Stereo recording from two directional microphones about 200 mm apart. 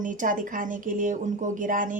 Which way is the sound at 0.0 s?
40° right (ahead or behind).